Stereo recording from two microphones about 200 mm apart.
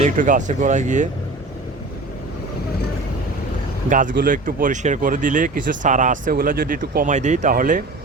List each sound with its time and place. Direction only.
0.0 s speech: 40° right (ahead or behind)
3.8 s speech: 40° right (ahead or behind)